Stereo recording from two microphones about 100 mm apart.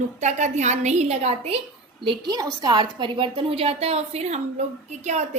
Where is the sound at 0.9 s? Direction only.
90° right.